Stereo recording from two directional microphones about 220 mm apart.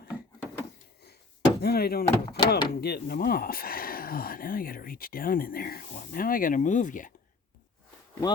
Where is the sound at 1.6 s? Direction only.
45° left (ahead or behind).